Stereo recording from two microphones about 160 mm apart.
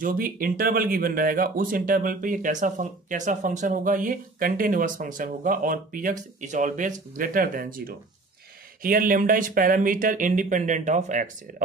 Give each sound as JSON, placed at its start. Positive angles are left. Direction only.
{"t": 0.0, "sound": "speech", "side_deg": -60}